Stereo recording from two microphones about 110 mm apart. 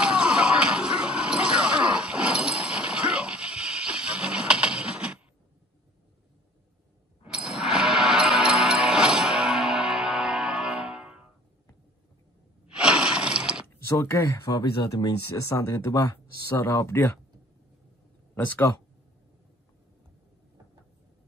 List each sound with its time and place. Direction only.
0.0 s a sound: 10° right (ahead or behind)
7.3 s music: 5° right (ahead or behind)
12.6 s a sound: 10° right (ahead or behind)
13.8 s speech: 25° left (ahead or behind)
14.4 s speech: 40° left (ahead or behind)
15.4 s speech: 30° left (ahead or behind)